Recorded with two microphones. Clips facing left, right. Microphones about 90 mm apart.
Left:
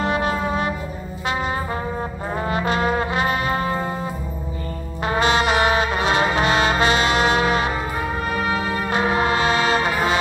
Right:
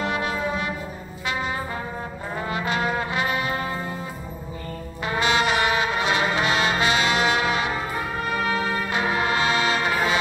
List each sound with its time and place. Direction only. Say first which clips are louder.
0.0 s music: left 4 dB; 40° left (ahead or behind)
2.3 s trombone: left 4 dB; 40° left (ahead or behind)
5.0 s brass instrument: left 3 dB; 35° left (ahead or behind)
8.9 s music: left 5 dB; 35° left (ahead or behind)